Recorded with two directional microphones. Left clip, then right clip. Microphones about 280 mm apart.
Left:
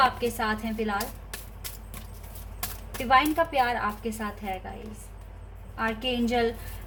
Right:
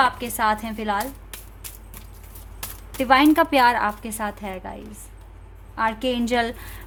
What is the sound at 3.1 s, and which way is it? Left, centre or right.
Speech, right.